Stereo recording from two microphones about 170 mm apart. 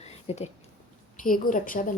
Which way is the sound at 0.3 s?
35° left (ahead or behind).